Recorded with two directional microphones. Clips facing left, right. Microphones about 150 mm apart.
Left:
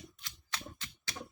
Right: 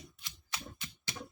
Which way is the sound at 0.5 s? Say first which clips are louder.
Even; 15° right (ahead or behind).